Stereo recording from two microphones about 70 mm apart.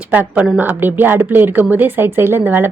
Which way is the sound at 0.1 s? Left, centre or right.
Right.